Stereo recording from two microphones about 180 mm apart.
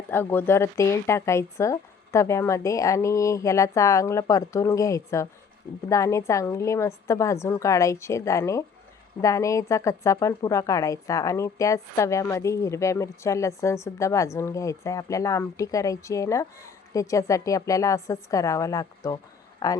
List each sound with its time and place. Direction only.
0.1 s speech: 10° left (ahead or behind)